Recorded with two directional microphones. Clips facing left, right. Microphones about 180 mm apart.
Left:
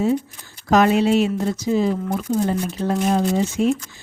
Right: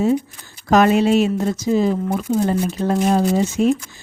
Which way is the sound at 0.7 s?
50° right (ahead or behind).